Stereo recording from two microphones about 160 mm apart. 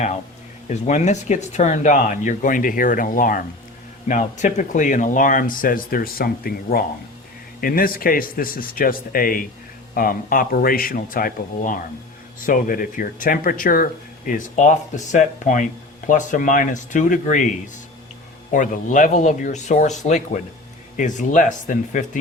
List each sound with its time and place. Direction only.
0.7 s speech: 45° left (ahead or behind)
18.5 s speech: 55° left (ahead or behind)